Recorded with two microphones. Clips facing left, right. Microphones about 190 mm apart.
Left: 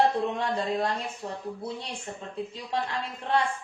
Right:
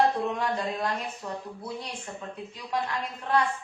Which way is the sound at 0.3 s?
30° left (ahead or behind).